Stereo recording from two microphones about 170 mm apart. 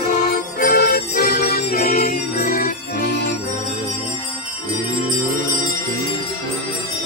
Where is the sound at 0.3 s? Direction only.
55° left (ahead or behind).